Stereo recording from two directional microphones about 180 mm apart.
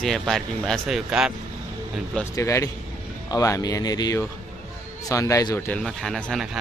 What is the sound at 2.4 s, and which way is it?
Speech, 15° left (ahead or behind).